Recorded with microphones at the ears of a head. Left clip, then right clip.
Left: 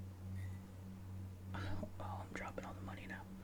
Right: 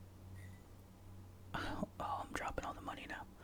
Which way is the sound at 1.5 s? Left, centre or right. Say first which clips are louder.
Right 6 dB; right.